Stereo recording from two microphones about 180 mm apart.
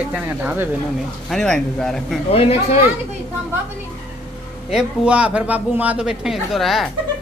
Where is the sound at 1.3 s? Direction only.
5° left (ahead or behind).